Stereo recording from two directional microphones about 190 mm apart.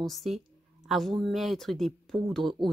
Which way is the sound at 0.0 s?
Centre (ahead or behind).